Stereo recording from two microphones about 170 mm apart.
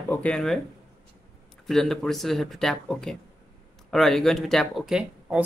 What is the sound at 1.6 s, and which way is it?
Speech, centre (ahead or behind).